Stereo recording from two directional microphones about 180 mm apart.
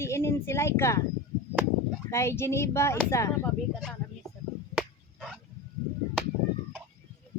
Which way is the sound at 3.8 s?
Centre (ahead or behind).